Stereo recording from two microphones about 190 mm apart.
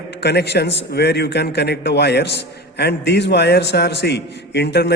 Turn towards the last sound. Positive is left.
turn(degrees=60)  # may be behind; listen again after turning